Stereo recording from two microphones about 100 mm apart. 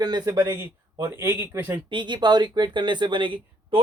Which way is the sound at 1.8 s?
50° right (ahead or behind).